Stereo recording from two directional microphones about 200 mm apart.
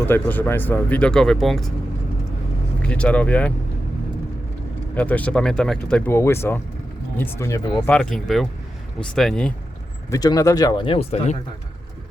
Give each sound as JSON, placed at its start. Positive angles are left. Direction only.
{"t": 0.0, "sound": "speech", "side_deg": 10}
{"t": 2.8, "sound": "speech", "side_deg": 5}
{"t": 4.9, "sound": "speech", "side_deg": 5}
{"t": 7.9, "sound": "speech", "side_deg": 5}
{"t": 10.1, "sound": "speech", "side_deg": 20}